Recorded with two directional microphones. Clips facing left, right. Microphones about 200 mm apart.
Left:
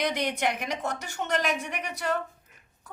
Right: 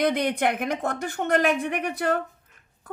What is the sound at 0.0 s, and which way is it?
A woman's voice, 55° right (ahead or behind).